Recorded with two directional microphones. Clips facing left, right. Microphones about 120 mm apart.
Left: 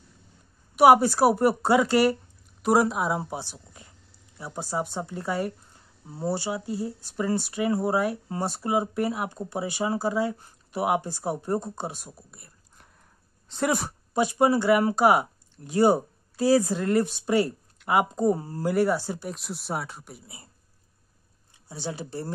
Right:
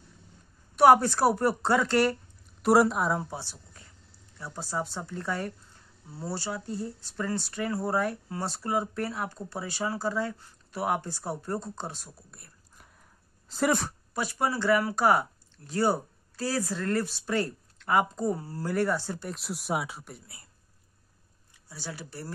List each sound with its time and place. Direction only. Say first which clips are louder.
0.7 s speech: left 2 dB; 10° left (ahead or behind)
3.2 s speech: left 3 dB; 15° left (ahead or behind)
12.4 s a sound: left 1 dB; centre (ahead or behind)
13.5 s speech: even; centre (ahead or behind)
14.1 s speech: left 8 dB; 20° left (ahead or behind); by 20.2 s centre (ahead or behind)
21.6 s speech: left 7 dB; 25° left (ahead or behind)